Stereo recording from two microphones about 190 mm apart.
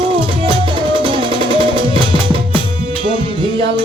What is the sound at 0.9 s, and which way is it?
Music, 25° right (ahead or behind).